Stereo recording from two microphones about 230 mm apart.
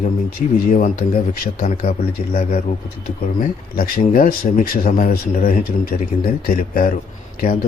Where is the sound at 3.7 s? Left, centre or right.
Left.